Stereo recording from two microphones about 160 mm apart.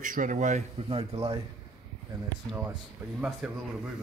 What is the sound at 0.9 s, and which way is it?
Speech, 40° right (ahead or behind).